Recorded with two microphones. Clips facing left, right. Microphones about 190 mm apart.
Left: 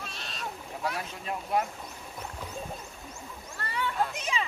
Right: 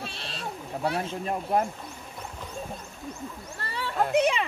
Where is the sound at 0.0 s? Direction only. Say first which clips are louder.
Right 3 dB; 30° right (ahead or behind).